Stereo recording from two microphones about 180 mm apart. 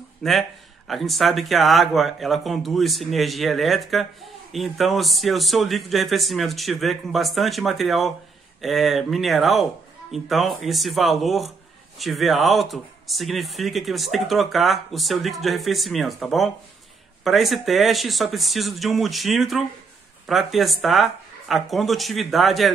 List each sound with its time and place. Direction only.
0.2 s speech: centre (ahead or behind)